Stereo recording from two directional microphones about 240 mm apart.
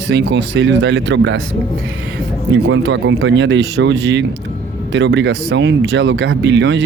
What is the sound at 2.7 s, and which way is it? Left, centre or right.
Speech, right.